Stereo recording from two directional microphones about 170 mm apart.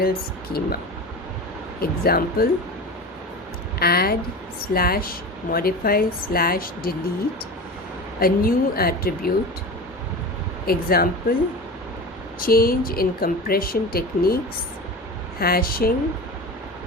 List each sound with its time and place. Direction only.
0.0 s speech: 65° left (ahead or behind)
1.8 s speech: 60° left (ahead or behind)
3.8 s speech: 65° left (ahead or behind)
8.2 s speech: 60° left (ahead or behind)
10.7 s speech: 60° left (ahead or behind)
12.4 s speech: 60° left (ahead or behind)
15.4 s speech: 60° left (ahead or behind)